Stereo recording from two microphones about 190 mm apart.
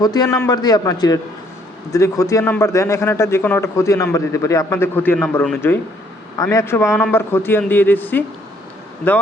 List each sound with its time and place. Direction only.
0.0 s a man's voice: 20° left (ahead or behind)